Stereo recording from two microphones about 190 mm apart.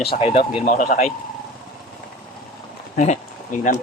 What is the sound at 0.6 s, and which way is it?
Speech, 45° left (ahead or behind).